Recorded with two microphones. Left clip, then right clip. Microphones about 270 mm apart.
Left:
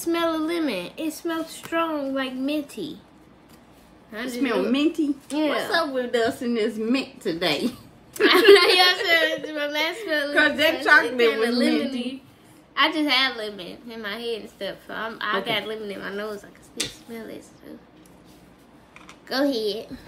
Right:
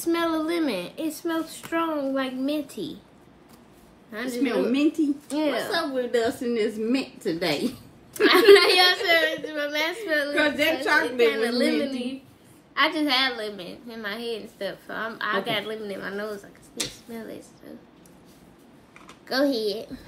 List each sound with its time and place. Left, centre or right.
0.0 s a sound: centre
1.2 s a woman's voice: centre
4.3 s a woman's voice: centre
5.3 s a woman's voice: centre
5.7 s a woman's voice: centre
8.1 s a woman's voice: centre
10.3 s a woman's voice: centre
11.2 s a woman's voice: centre
19.0 s a child's voice: centre